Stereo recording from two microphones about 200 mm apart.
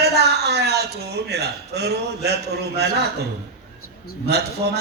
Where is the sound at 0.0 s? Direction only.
55° right (ahead or behind).